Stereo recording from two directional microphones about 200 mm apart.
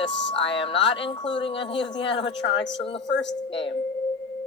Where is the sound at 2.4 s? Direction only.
60° left (ahead or behind).